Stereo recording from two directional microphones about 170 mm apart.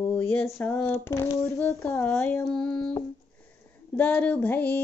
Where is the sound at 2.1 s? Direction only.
Centre (ahead or behind).